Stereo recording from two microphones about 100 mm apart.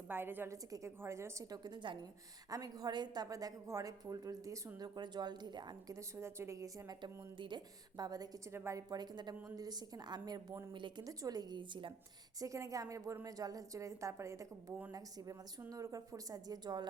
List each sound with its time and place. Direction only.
0.1 s a woman's voice: 20° right (ahead or behind)
1.5 s a woman's voice: 45° right (ahead or behind)
4.8 s a woman's voice: 45° right (ahead or behind)
5.9 s a woman's voice: 30° right (ahead or behind)
7.0 s a woman's voice: 50° right (ahead or behind)
8.5 s a woman's voice: 25° right (ahead or behind)
8.9 s a woman's voice: 45° right (ahead or behind)
12.4 s a woman's voice: 35° right (ahead or behind)
15.7 s a woman's voice: 35° right (ahead or behind)